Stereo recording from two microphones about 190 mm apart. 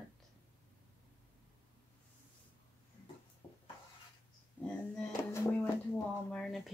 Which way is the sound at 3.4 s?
15° left (ahead or behind).